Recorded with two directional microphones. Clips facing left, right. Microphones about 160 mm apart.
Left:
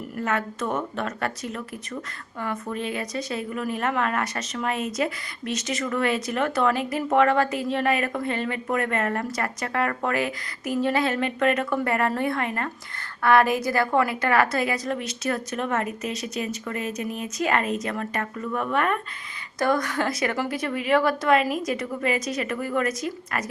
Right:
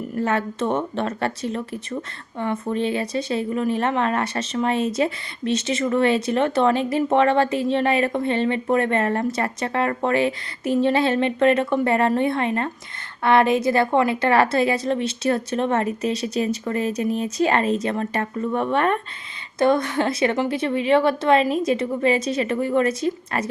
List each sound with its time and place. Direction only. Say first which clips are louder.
0.2 s speech: right 4 dB; 30° right (ahead or behind)